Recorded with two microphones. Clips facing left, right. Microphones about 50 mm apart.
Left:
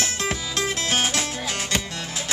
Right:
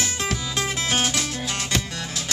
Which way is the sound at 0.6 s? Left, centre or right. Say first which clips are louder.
Even; centre.